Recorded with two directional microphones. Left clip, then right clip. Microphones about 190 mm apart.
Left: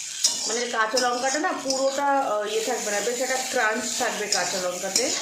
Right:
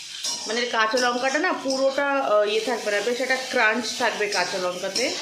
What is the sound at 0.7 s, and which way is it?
Speech, 15° right (ahead or behind).